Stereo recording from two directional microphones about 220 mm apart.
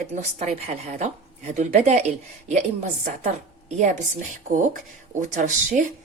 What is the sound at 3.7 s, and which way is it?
Speech, 30° right (ahead or behind).